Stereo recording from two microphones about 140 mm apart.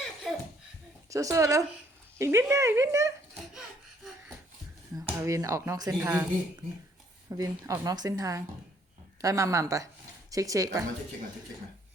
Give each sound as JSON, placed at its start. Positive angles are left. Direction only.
{"t": 0.3, "sound": "laughter", "side_deg": 0}
{"t": 1.1, "sound": "a woman's voice", "side_deg": -20}
{"t": 5.0, "sound": "a woman's voice", "side_deg": -20}
{"t": 7.3, "sound": "a woman's voice", "side_deg": -25}